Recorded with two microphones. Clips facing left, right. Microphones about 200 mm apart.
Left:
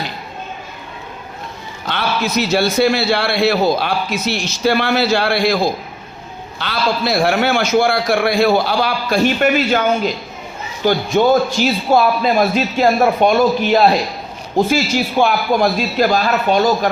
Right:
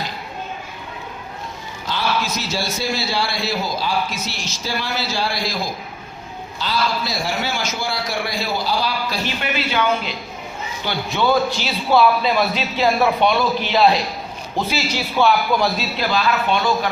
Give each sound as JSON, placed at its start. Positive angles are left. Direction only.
{"t": 1.9, "sound": "a man's voice", "side_deg": 65}
{"t": 6.6, "sound": "a man's voice", "side_deg": 65}